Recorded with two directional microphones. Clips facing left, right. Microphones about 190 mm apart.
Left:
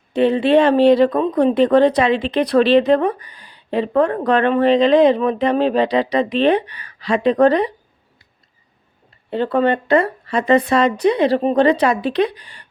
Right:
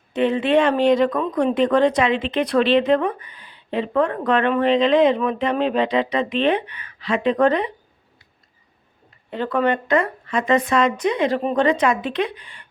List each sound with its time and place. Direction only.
0.1 s speech: 35° left (ahead or behind)
9.3 s speech: 30° left (ahead or behind)